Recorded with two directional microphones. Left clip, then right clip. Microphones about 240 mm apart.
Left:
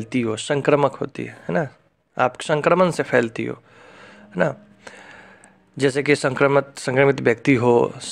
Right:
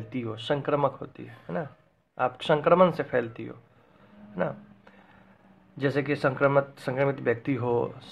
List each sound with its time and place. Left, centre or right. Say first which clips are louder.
0.0 s speech: left 11 dB; left